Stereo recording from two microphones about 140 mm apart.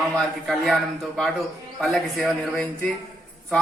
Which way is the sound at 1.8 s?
Centre (ahead or behind).